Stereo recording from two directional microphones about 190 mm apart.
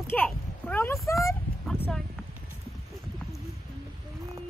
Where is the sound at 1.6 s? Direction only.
5° left (ahead or behind).